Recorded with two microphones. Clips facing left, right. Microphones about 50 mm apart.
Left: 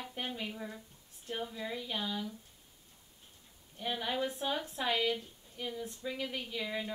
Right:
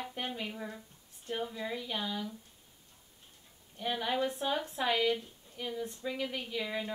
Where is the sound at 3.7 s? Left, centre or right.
Centre.